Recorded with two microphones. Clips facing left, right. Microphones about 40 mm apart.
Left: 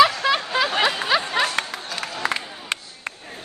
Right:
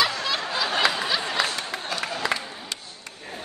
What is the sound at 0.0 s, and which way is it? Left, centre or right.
Snicker, left.